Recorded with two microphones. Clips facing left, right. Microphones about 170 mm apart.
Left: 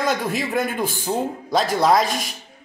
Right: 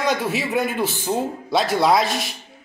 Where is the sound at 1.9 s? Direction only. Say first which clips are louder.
Even; 45° left (ahead or behind).